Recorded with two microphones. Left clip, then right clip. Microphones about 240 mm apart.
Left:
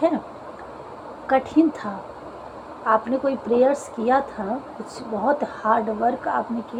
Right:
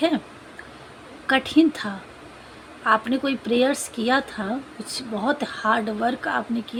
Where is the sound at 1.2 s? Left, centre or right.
Right.